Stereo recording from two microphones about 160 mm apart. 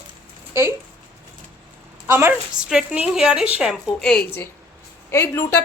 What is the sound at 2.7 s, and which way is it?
A woman's voice, 5° right (ahead or behind).